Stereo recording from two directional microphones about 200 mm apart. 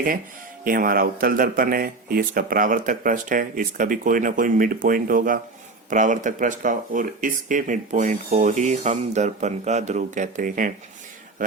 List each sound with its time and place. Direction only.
0.6 s speech: 45° right (ahead or behind)